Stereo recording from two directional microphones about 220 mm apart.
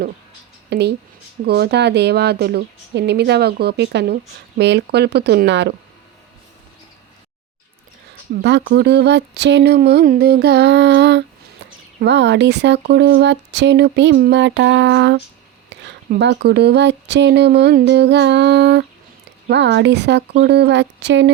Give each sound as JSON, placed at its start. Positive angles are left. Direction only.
{"t": 0.7, "sound": "a woman's voice", "side_deg": -50}
{"t": 8.6, "sound": "a woman's voice", "side_deg": -50}